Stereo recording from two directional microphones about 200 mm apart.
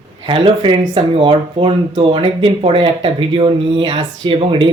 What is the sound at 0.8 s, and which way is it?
Speech, 30° right (ahead or behind).